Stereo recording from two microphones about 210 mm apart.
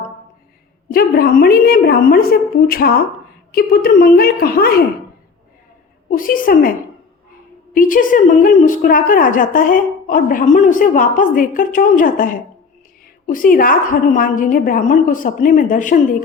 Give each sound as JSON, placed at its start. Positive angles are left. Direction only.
{"t": 0.9, "sound": "a woman's voice", "side_deg": 45}
{"t": 6.1, "sound": "a woman's voice", "side_deg": 40}